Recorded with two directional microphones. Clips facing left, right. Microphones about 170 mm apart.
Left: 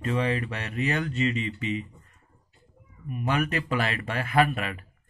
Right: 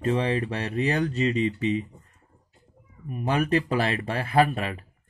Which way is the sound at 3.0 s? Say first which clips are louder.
Right 3 dB; 35° right (ahead or behind).